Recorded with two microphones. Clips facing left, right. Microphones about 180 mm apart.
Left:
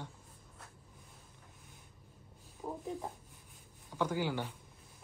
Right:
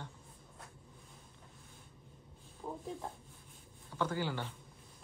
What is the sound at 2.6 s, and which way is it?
Speech, 5° left (ahead or behind).